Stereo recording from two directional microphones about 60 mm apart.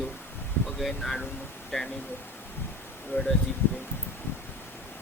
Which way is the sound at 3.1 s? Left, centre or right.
Left.